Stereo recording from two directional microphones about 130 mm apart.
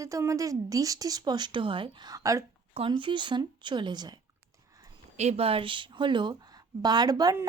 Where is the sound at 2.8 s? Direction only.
40° right (ahead or behind).